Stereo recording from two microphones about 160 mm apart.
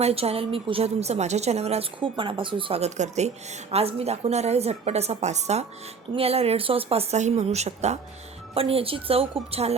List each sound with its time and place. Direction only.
0.0 s a woman's voice: 40° right (ahead or behind)